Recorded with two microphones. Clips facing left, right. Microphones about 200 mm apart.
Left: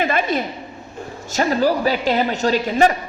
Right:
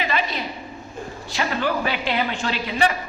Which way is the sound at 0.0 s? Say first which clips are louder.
Left 6 dB; 50° left (ahead or behind).